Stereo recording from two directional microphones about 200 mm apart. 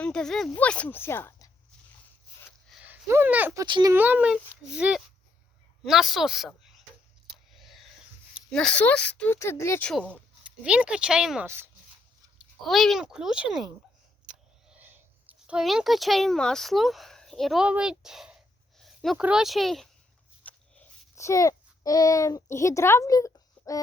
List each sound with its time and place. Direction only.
0.0 s speech: 5° left (ahead or behind)
2.6 s speech: 5° right (ahead or behind)
3.9 s speech: 10° right (ahead or behind)
7.5 s a sound: centre (ahead or behind)
8.4 s speech: 5° left (ahead or behind)
10.4 s speech: 5° right (ahead or behind)
12.4 s speech: centre (ahead or behind)
14.7 s speech: 10° right (ahead or behind)
20.4 s a sound: 5° left (ahead or behind)